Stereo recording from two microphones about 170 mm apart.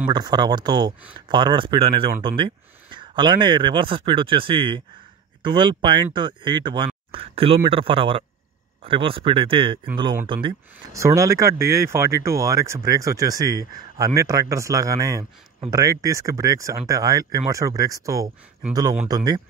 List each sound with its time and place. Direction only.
0.1 s speech: 25° right (ahead or behind)
11.0 s speech: 15° right (ahead or behind)